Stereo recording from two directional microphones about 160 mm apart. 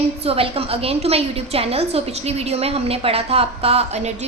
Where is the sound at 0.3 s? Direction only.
35° right (ahead or behind).